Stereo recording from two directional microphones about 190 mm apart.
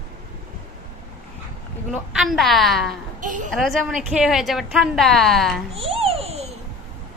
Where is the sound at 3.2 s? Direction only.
45° right (ahead or behind).